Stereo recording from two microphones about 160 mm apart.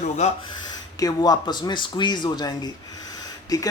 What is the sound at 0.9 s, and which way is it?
A man's voice, 25° left (ahead or behind).